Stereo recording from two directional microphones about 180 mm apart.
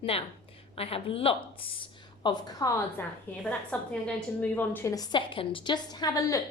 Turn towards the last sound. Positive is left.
turn(degrees=20)  # may be behind; listen again after turning